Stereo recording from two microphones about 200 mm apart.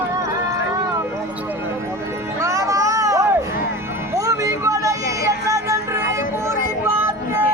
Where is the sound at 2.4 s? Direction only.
15° right (ahead or behind).